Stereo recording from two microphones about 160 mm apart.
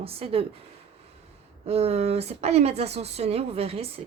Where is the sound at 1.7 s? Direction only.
40° right (ahead or behind).